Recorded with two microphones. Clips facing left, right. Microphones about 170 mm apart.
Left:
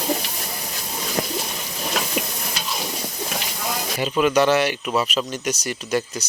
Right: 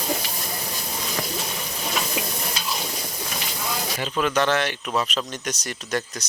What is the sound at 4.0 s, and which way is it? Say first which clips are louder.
Speech: left 5 dB; 10° left (ahead or behind).